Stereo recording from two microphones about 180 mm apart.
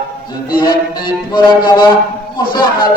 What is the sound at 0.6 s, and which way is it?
Music, 25° left (ahead or behind).